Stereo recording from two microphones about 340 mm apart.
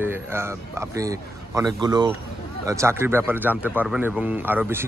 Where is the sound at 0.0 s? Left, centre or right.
Centre.